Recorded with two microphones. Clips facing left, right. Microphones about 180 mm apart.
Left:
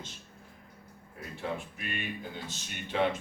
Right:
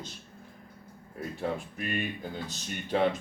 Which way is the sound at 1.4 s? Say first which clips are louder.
Right 3 dB; 40° right (ahead or behind).